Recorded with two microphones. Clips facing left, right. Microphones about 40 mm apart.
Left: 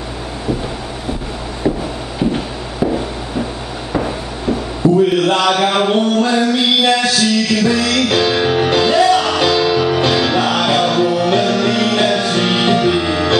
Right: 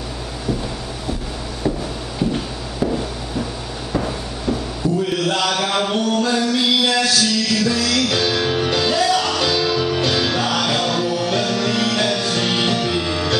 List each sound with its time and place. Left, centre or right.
2.1 s music: centre
3.9 s a sound: centre
5.1 s mantra: left